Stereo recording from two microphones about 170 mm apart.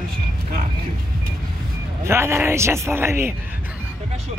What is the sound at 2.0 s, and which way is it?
Speech, 15° right (ahead or behind).